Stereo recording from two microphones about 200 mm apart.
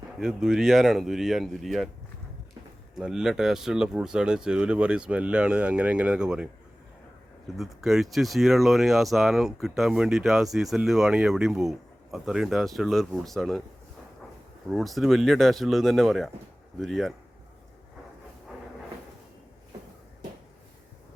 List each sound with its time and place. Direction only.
0.2 s speech: centre (ahead or behind)
2.9 s speech: 5° right (ahead or behind)
7.5 s speech: centre (ahead or behind)
14.7 s speech: centre (ahead or behind)